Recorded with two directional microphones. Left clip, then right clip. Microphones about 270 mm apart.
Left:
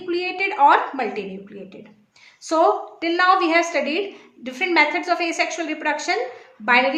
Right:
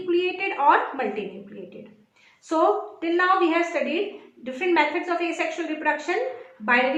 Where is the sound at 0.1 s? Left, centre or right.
Left.